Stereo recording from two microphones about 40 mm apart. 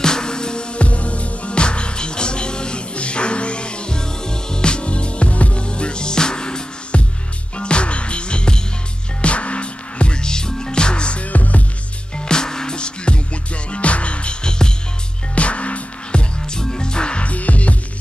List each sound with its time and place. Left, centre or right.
0.0 s music: centre
0.8 s music: left
12.3 s music: centre; by 17.7 s left